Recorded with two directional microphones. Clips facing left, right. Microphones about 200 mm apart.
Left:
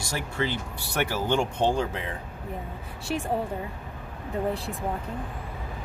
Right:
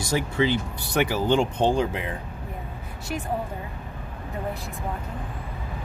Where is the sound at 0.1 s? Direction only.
20° right (ahead or behind).